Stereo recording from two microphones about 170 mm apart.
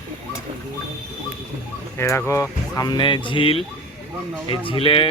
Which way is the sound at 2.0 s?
15° left (ahead or behind).